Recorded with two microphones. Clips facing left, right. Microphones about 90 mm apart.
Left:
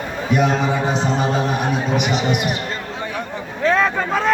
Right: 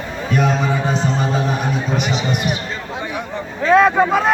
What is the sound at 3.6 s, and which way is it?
Vehicle, 10° right (ahead or behind).